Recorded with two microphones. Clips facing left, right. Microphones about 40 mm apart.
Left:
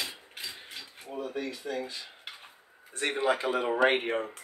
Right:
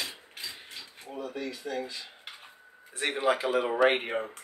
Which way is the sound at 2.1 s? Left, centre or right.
Centre.